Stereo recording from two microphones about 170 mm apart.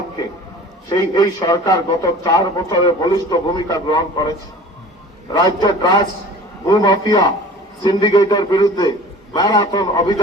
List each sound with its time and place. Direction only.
0.9 s a man's voice: 25° left (ahead or behind)
5.3 s a man's voice: 25° left (ahead or behind)